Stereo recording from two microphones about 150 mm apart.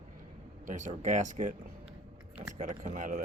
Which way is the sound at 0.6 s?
55° right (ahead or behind).